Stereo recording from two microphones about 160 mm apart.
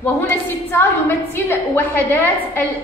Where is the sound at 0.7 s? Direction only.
15° left (ahead or behind).